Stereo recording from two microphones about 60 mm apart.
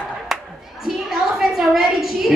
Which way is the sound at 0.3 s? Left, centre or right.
Centre.